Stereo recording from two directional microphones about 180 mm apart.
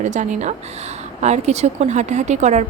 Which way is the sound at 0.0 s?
40° right (ahead or behind).